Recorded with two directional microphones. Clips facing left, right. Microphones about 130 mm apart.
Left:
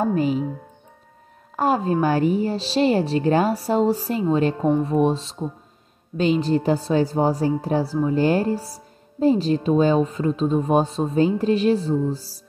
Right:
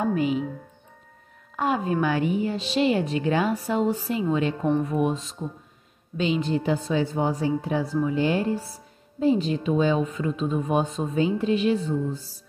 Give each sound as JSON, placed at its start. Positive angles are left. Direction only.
{"t": 0.0, "sound": "a woman's voice", "side_deg": 35}
{"t": 1.6, "sound": "a woman's voice", "side_deg": 35}